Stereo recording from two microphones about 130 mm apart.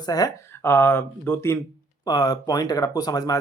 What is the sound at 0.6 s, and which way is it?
Speech, 20° left (ahead or behind).